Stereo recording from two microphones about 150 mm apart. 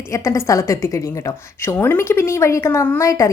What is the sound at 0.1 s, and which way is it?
A woman's voice, 20° left (ahead or behind).